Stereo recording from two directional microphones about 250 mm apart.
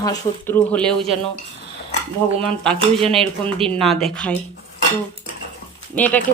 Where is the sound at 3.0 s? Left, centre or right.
Right.